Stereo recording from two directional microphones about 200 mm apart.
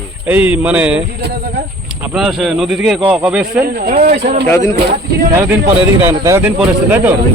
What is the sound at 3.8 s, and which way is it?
Speech, 40° right (ahead or behind).